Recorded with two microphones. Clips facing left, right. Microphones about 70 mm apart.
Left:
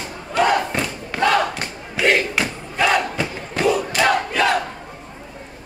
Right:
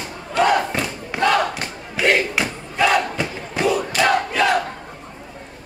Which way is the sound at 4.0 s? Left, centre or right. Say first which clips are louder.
Even; centre.